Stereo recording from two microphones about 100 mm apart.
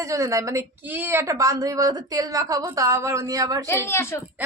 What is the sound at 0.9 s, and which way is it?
A woman's voice, 20° right (ahead or behind).